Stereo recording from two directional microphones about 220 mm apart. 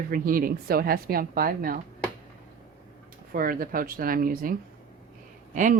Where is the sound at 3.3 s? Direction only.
40° right (ahead or behind).